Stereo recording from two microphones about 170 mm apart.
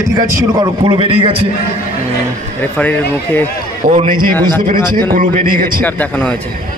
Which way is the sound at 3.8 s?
50° right (ahead or behind).